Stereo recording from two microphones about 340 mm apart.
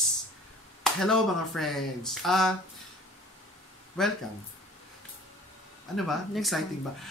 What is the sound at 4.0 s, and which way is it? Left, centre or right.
Speech, centre.